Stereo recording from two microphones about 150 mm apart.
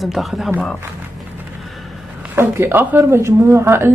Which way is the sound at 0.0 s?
Centre (ahead or behind).